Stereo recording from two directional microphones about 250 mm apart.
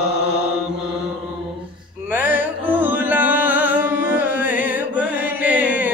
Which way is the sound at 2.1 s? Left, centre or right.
Centre.